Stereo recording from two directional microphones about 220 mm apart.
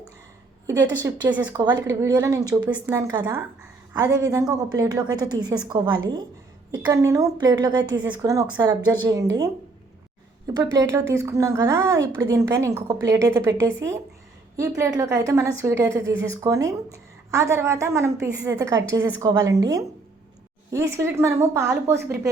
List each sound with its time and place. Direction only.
1.0 s a woman's voice: 10° right (ahead or behind)